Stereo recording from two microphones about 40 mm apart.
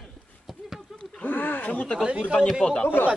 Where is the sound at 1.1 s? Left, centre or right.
Left.